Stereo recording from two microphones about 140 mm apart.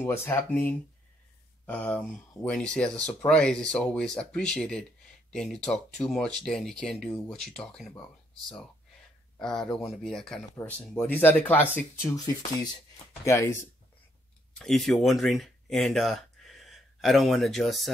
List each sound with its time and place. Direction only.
0.0 s speech: 15° left (ahead or behind)
9.4 s speech: 5° left (ahead or behind)
13.2 s speech: 20° left (ahead or behind)
14.6 s speech: 5° left (ahead or behind)